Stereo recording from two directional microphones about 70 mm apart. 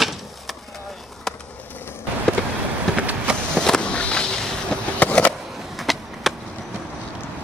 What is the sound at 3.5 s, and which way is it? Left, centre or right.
Boat, centre.